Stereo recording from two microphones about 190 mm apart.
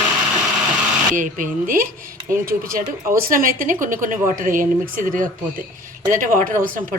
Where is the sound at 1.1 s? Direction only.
45° right (ahead or behind).